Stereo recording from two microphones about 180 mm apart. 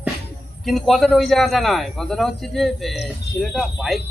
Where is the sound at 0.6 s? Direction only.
Centre (ahead or behind).